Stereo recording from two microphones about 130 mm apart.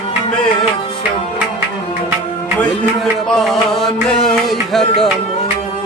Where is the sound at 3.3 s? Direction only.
5° left (ahead or behind).